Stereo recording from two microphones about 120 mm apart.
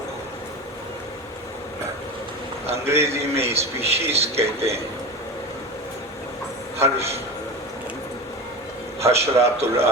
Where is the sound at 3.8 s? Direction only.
60° right (ahead or behind).